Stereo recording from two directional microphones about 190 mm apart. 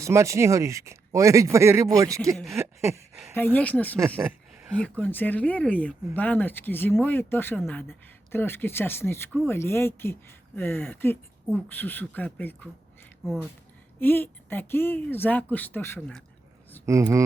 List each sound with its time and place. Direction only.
0.0 s speech: 15° right (ahead or behind)
3.3 s speech: 10° left (ahead or behind)
14.0 s speech: 10° left (ahead or behind)
16.8 s speech: 15° right (ahead or behind)